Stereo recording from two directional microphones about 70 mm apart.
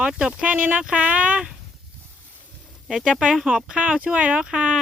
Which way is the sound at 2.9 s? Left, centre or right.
Centre.